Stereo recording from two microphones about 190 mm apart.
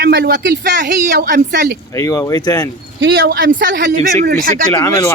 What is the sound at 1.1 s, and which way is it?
Speech, 50° right (ahead or behind).